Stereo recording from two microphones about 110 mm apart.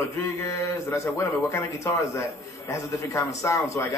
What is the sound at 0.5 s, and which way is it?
A man's voice, 30° left (ahead or behind).